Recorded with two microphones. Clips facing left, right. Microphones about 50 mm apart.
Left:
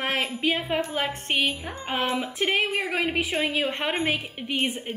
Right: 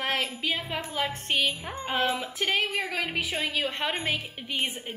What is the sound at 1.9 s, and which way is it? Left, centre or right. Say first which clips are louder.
A woman's voice: left 1 dB; left.